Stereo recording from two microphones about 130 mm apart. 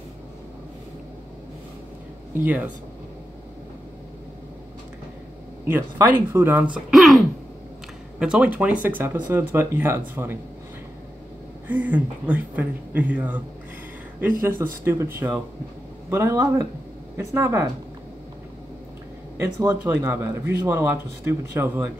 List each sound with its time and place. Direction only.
2.3 s speech: 15° right (ahead or behind)
5.7 s speech: 20° right (ahead or behind)
6.9 s speech: centre (ahead or behind); by 10.4 s 15° right (ahead or behind)
11.6 s speech: 15° right (ahead or behind)
14.4 s speech: 15° right (ahead or behind)
19.4 s speech: 25° right (ahead or behind)